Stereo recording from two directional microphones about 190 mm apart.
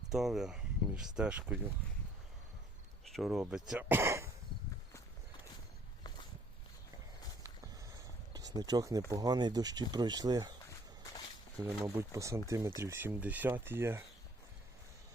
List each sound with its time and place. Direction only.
0.1 s speech: centre (ahead or behind)
3.0 s speech: centre (ahead or behind)
8.3 s speech: 20° right (ahead or behind)
11.6 s speech: 15° right (ahead or behind)